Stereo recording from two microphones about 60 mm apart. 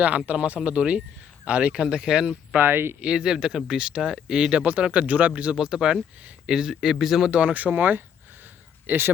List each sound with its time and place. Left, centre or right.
0.3 s speech: right
2.6 s speech: right
3.0 s speech: centre
5.5 s speech: centre
7.3 s speech: centre; by 9.1 s right